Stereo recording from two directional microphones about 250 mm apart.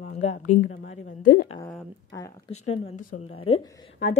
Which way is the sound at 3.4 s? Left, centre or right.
Left.